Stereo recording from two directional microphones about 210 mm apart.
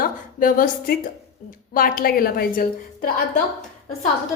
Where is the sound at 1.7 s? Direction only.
45° left (ahead or behind).